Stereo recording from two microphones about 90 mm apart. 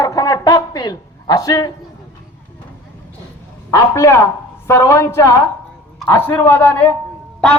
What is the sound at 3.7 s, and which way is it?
A man's voice, 35° left (ahead or behind).